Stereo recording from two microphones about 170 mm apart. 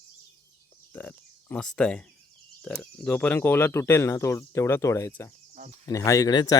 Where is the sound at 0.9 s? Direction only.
10° left (ahead or behind).